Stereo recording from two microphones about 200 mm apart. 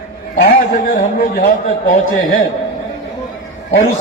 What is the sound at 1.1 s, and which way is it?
A man's voice, 40° left (ahead or behind).